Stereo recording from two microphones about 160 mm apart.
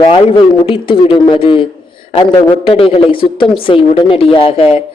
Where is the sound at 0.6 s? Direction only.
35° left (ahead or behind).